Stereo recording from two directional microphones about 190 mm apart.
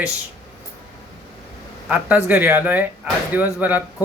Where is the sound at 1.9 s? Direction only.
10° right (ahead or behind).